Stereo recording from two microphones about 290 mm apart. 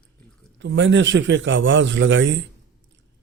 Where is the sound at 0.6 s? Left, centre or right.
Right.